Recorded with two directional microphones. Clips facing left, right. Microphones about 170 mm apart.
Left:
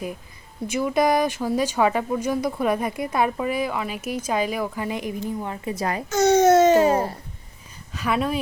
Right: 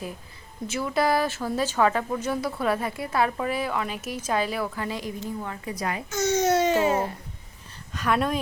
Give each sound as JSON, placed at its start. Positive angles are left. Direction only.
{"t": 0.7, "sound": "speech", "side_deg": 15}
{"t": 6.1, "sound": "babbling", "side_deg": 70}
{"t": 7.9, "sound": "speech", "side_deg": 5}